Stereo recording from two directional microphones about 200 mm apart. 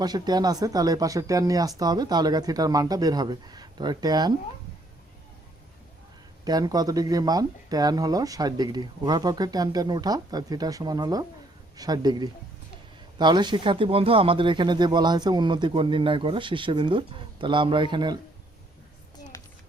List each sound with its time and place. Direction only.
0.0 s speech: 20° right (ahead or behind)
6.4 s speech: 20° right (ahead or behind)